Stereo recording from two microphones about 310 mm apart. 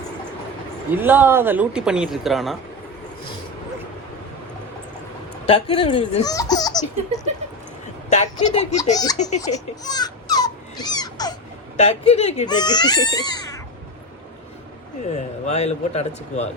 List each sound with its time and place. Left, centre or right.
0.9 s speech: centre
5.5 s speech: centre
8.1 s speech: left
9.2 s a sound: centre
11.8 s speech: left
15.0 s speech: left